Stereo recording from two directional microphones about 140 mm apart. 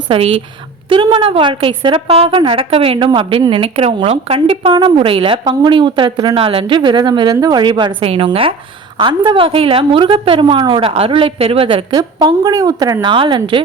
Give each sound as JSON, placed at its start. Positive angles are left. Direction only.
{"t": 0.1, "sound": "a woman's voice", "side_deg": -40}